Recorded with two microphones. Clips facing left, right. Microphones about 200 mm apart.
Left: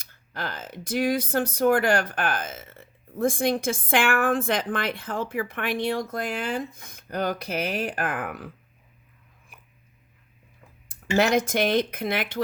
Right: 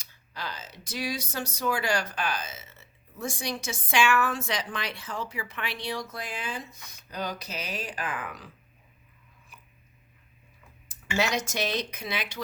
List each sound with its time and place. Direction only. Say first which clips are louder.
0.0 s speech: left 5 dB; 55° left (ahead or behind)
11.2 s speech: left 7 dB; 55° left (ahead or behind)